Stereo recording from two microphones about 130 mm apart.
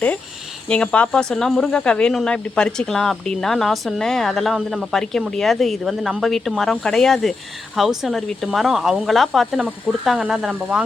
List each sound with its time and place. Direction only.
0.7 s speech: 10° left (ahead or behind); by 10.8 s 5° right (ahead or behind)